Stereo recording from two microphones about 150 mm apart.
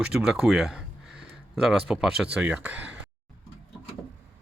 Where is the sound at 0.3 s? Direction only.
Centre (ahead or behind).